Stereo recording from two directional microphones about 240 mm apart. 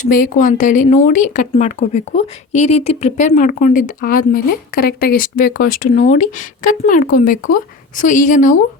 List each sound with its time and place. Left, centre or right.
0.0 s speech: left